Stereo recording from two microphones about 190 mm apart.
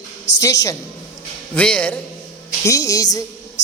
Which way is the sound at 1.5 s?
5° left (ahead or behind).